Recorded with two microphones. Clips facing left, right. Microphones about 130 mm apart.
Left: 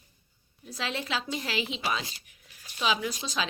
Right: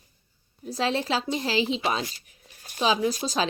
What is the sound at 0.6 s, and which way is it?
A woman's voice, 35° right (ahead or behind).